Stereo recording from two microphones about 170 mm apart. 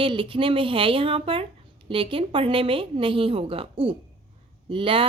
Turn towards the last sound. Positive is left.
turn(degrees=-30)  # may be behind; listen again after turning